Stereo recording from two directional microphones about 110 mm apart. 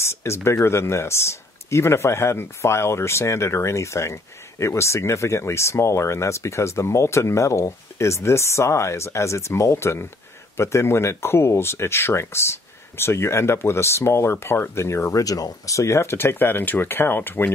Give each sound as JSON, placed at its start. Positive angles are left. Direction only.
{"t": 0.0, "sound": "speech", "side_deg": 25}